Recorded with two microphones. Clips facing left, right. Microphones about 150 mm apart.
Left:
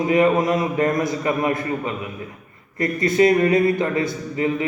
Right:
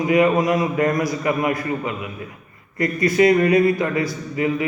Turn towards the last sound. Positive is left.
turn(degrees=30)  # may be behind; listen again after turning